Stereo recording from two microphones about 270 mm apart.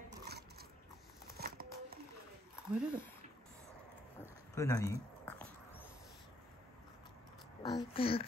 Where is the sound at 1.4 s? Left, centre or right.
Right.